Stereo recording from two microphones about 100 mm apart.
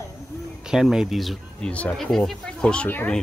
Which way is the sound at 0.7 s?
5° right (ahead or behind).